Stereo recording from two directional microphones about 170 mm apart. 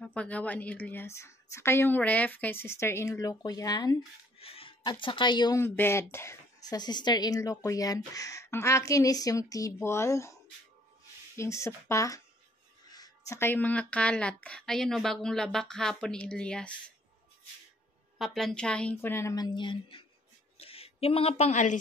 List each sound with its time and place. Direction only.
0.0 s a woman's voice: 10° left (ahead or behind)
4.4 s a sound: 35° left (ahead or behind)
5.0 s speech: 30° left (ahead or behind)
5.6 s speech: 15° left (ahead or behind)
11.3 s a woman's voice: 15° left (ahead or behind)
18.1 s a woman's voice: centre (ahead or behind); by 21.7 s 45° left (ahead or behind)